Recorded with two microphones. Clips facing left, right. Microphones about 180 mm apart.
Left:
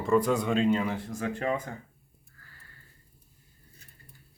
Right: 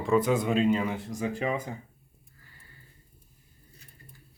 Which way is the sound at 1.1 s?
15° right (ahead or behind).